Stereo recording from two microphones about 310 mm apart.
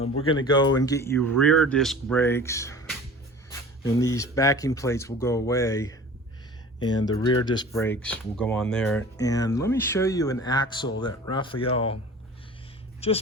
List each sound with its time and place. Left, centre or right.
0.3 s speech: centre